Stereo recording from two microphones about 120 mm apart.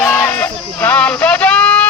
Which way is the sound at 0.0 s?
15° left (ahead or behind).